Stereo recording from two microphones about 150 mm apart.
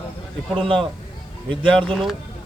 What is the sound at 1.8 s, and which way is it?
Speech, 5° left (ahead or behind).